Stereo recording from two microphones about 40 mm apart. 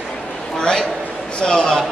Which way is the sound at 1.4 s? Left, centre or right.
Centre.